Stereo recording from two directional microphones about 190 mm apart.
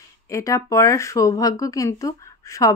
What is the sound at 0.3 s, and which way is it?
Speech, 15° left (ahead or behind).